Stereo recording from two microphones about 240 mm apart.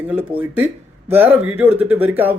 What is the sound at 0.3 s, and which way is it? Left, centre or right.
Speech, centre.